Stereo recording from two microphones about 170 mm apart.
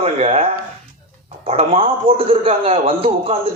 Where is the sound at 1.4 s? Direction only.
35° right (ahead or behind).